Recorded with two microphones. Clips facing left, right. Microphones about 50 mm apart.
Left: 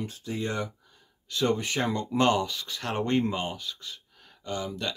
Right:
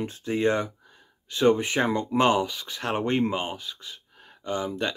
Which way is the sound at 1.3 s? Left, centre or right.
Right.